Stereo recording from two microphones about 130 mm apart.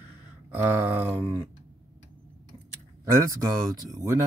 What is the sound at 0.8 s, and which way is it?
Speech, 15° right (ahead or behind).